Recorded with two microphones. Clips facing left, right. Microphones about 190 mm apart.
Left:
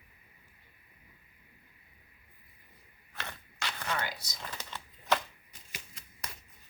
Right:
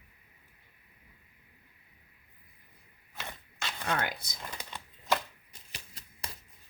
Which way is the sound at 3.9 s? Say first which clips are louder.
Right 4 dB; 55° right (ahead or behind).